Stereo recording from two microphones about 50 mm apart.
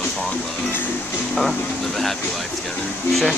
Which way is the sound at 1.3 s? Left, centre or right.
Centre.